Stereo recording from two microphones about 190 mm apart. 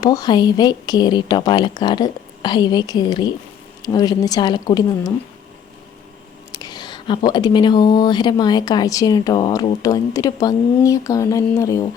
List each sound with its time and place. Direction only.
0.0 s speech: 20° left (ahead or behind)
6.5 s speech: 20° left (ahead or behind)